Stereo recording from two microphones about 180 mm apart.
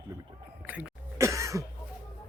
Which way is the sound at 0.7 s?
10° right (ahead or behind).